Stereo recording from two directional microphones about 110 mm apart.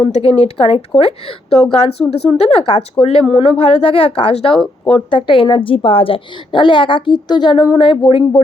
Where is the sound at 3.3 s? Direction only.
55° left (ahead or behind).